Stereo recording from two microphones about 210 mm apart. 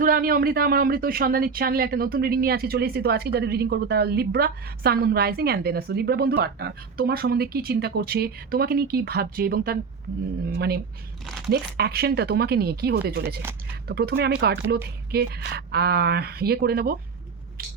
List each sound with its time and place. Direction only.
0.0 s speech: 45° right (ahead or behind)